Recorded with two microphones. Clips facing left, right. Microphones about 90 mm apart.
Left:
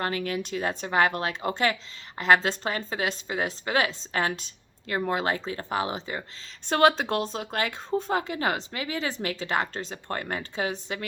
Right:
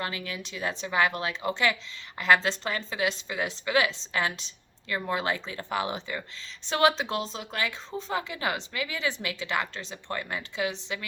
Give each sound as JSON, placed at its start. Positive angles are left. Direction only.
{"t": 0.0, "sound": "a woman's voice", "side_deg": 45}
{"t": 6.7, "sound": "speech", "side_deg": 45}